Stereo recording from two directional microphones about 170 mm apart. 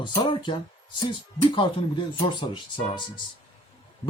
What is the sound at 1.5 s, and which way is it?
Speech, 30° left (ahead or behind).